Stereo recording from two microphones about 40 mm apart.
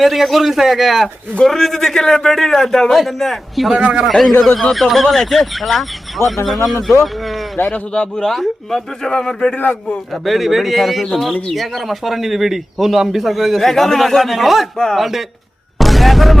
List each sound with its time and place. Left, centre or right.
0.0 s speech: centre
1.5 s speech: centre
7.7 s speech: left
8.2 s speech: centre
9.1 s speech: centre
10.2 s speech: centre
15.8 s music: centre